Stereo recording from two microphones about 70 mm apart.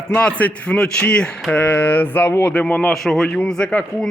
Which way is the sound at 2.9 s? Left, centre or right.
Centre.